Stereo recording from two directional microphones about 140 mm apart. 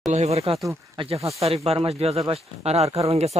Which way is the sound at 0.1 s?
50° right (ahead or behind).